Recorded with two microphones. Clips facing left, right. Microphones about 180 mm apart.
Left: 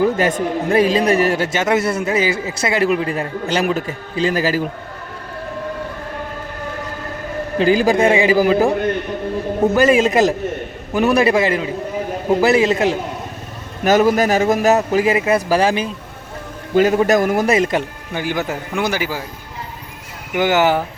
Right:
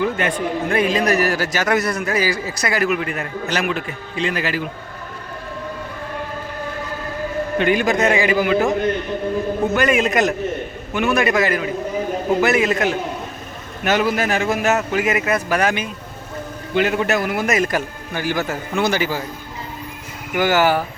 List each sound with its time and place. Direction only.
0.0 s a man's voice: 40° left (ahead or behind)
7.6 s a man's voice: 30° left (ahead or behind)
9.7 s a man's voice: 35° left (ahead or behind)
13.8 s a man's voice: 40° left (ahead or behind); by 19.2 s 10° left (ahead or behind)
20.3 s a man's voice: 20° left (ahead or behind)